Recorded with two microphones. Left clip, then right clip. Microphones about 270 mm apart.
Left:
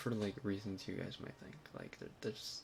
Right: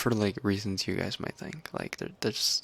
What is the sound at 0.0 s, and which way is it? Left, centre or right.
Speech, right.